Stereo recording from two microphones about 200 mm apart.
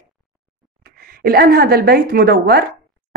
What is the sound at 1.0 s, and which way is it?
Speech, 50° right (ahead or behind).